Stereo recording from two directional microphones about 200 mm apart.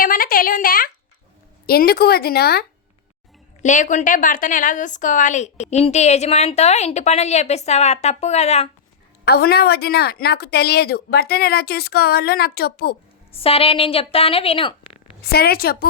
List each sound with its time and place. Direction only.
0.0 s a sound: 45° left (ahead or behind)
1.6 s a woman's voice: 50° left (ahead or behind)
3.6 s a woman's voice: 40° left (ahead or behind)
9.2 s a woman's voice: 50° left (ahead or behind)
13.3 s a woman's voice: 30° left (ahead or behind)
15.2 s a woman's voice: 50° left (ahead or behind)